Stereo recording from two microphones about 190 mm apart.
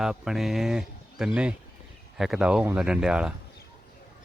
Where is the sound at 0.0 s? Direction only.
5° right (ahead or behind).